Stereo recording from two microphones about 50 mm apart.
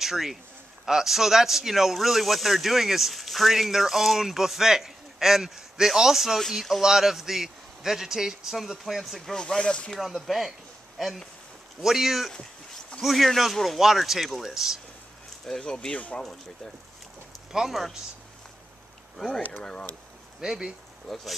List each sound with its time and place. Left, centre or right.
0.0 s a man's voice: centre
9.3 s speech: centre
9.9 s speech: centre
15.4 s speech: centre
17.5 s speech: centre
19.1 s speech: centre
20.3 s speech: centre
21.1 s speech: centre